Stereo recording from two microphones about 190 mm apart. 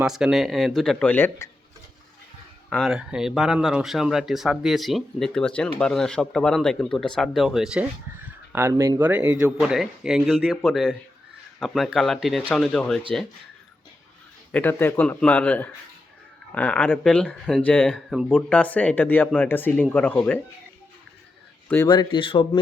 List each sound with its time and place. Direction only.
0.0 s speech: 5° right (ahead or behind)
2.6 s speech: centre (ahead or behind)
14.5 s speech: 10° left (ahead or behind)
21.8 s speech: 25° left (ahead or behind)